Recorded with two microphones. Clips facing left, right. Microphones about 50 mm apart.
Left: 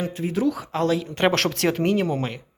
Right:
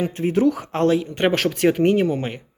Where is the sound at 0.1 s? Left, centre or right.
Right.